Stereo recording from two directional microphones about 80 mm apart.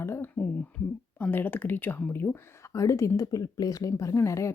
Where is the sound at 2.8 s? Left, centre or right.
Left.